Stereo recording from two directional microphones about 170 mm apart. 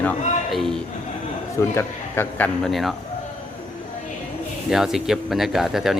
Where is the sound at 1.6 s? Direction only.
15° left (ahead or behind).